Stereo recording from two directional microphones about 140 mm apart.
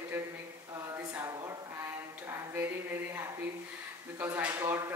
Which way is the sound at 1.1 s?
20° right (ahead or behind).